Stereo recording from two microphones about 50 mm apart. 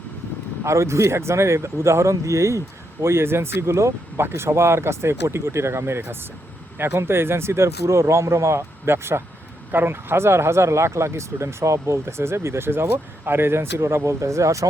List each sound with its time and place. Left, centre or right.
0.6 s speech: right
8.9 s speech: right